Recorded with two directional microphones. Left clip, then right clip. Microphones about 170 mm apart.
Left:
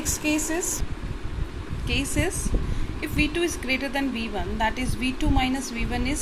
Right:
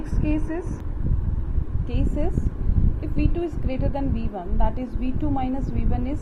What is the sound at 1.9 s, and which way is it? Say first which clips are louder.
A woman's voice: left 3 dB; 5° left (ahead or behind).